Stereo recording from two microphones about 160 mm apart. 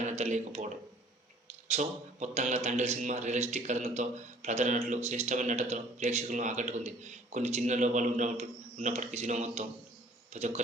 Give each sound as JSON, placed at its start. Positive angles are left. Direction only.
{"t": 0.0, "sound": "speech", "side_deg": -45}
{"t": 1.7, "sound": "speech", "side_deg": -45}